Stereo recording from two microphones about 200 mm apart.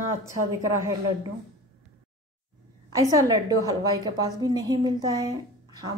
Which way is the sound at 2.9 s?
20° right (ahead or behind).